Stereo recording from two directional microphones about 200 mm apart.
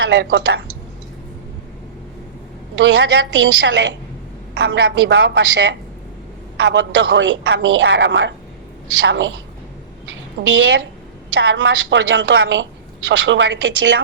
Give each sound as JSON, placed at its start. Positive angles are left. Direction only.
{"t": 0.0, "sound": "a woman's voice", "side_deg": -65}
{"t": 2.8, "sound": "a woman's voice", "side_deg": -65}
{"t": 10.5, "sound": "a woman's voice", "side_deg": -65}